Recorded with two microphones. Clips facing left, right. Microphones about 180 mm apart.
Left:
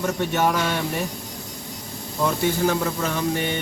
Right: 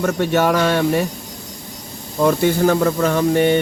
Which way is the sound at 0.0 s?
70° right (ahead or behind).